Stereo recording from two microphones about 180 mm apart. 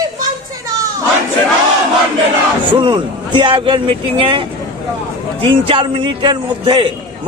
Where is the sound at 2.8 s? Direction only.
25° right (ahead or behind).